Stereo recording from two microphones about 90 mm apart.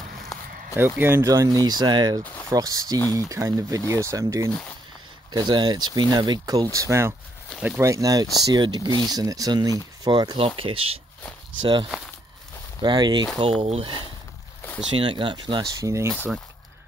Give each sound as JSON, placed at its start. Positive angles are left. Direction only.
{"t": 0.7, "sound": "speech", "side_deg": -25}
{"t": 1.3, "sound": "speech", "side_deg": -40}
{"t": 2.5, "sound": "speech", "side_deg": -40}
{"t": 5.3, "sound": "speech", "side_deg": -55}
{"t": 9.1, "sound": "speech", "side_deg": -40}
{"t": 10.4, "sound": "speech", "side_deg": -85}
{"t": 11.6, "sound": "speech", "side_deg": -60}
{"t": 13.6, "sound": "speech", "side_deg": -70}
{"t": 15.8, "sound": "speech", "side_deg": -35}